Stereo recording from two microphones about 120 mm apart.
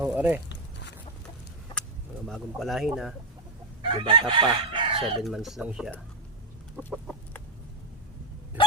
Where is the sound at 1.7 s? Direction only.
35° left (ahead or behind).